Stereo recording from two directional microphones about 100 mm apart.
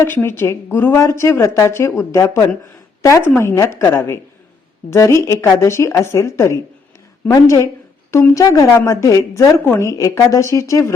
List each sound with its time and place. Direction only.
0.0 s a woman's voice: 25° left (ahead or behind)